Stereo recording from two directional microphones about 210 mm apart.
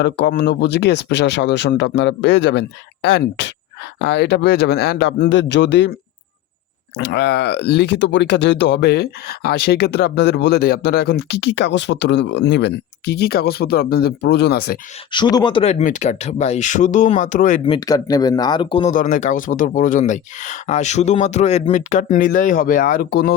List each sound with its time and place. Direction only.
0.0 s speech: 50° left (ahead or behind)
6.9 s speech: 55° left (ahead or behind)
15.1 s speech: 20° left (ahead or behind); by 17.6 s 35° left (ahead or behind)
17.7 s speech: 20° left (ahead or behind); by 23.3 s 45° left (ahead or behind)